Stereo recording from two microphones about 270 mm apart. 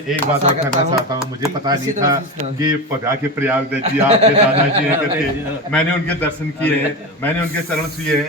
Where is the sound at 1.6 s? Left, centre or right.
Centre.